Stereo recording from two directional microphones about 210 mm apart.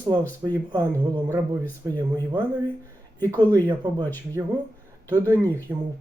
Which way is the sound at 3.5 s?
20° right (ahead or behind).